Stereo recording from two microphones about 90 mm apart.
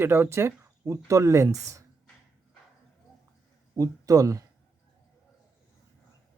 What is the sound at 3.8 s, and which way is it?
Speech, 40° right (ahead or behind).